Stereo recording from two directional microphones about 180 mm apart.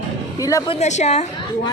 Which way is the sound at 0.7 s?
40° left (ahead or behind).